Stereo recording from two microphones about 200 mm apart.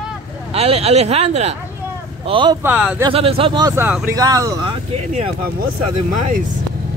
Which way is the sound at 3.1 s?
30° right (ahead or behind).